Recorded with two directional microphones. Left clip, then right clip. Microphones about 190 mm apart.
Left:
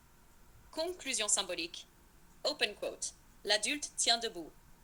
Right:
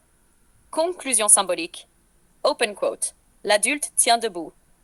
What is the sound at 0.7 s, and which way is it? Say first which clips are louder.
Speech: right 14 dB; 45° right (ahead or behind).